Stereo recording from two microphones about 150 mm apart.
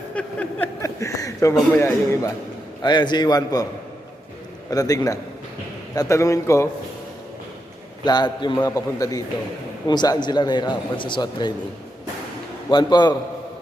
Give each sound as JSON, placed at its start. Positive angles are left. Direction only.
{"t": 0.1, "sound": "a sound", "side_deg": 10}
{"t": 0.8, "sound": "a sound", "side_deg": 20}
{"t": 1.7, "sound": "a man's voice", "side_deg": 20}
{"t": 2.8, "sound": "a man's voice", "side_deg": 30}
{"t": 4.7, "sound": "a man's voice", "side_deg": 25}
{"t": 8.0, "sound": "a man's voice", "side_deg": 30}
{"t": 12.7, "sound": "a man's voice", "side_deg": 30}